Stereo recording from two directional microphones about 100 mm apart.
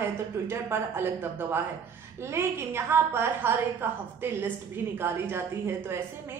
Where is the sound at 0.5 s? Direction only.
25° right (ahead or behind).